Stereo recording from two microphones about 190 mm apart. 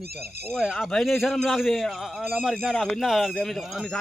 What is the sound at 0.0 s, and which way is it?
Speech, 55° right (ahead or behind).